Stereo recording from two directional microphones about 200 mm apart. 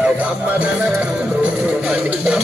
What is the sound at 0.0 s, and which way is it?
Music, 5° right (ahead or behind).